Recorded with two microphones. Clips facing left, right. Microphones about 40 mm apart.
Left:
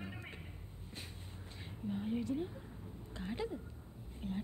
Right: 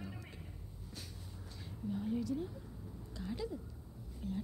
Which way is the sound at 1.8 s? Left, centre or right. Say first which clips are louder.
Even; left.